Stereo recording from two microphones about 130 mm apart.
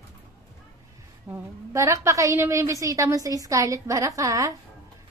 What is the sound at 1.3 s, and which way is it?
A woman's voice, 25° right (ahead or behind).